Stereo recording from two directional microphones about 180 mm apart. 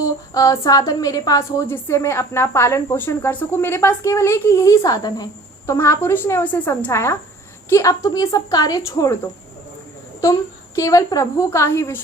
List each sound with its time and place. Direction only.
0.3 s a woman's voice: 20° left (ahead or behind)
10.8 s a woman's voice: 20° left (ahead or behind)